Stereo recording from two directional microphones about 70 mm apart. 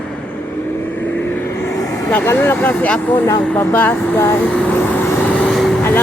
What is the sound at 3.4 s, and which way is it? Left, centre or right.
Speech, centre.